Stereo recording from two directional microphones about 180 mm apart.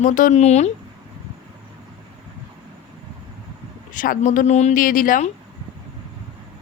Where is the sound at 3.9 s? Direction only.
50° left (ahead or behind).